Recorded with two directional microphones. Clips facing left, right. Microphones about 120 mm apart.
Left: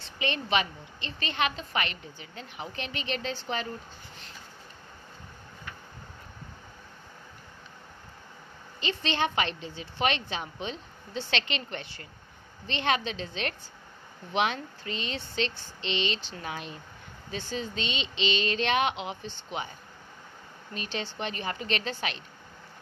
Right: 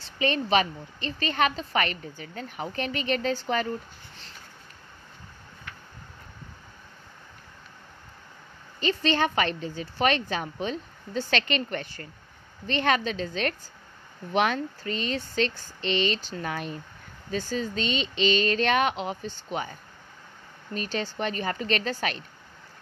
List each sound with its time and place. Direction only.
0.0 s a woman's voice: 40° right (ahead or behind)
8.7 s a woman's voice: 45° right (ahead or behind)
20.7 s a woman's voice: 45° right (ahead or behind)